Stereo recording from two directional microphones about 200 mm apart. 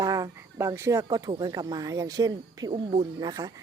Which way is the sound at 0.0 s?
15° right (ahead or behind).